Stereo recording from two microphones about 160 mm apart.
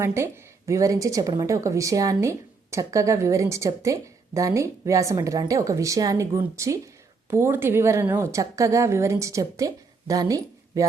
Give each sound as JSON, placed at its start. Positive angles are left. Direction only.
{"t": 0.0, "sound": "a woman's voice", "side_deg": -15}